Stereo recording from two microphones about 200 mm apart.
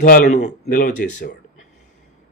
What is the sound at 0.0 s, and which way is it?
A man's voice, 45° left (ahead or behind).